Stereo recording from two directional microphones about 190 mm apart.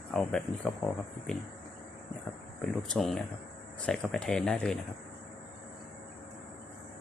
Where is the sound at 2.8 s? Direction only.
Centre (ahead or behind).